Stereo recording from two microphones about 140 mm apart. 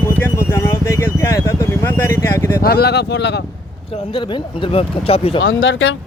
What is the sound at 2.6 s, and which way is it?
Speech, 90° left.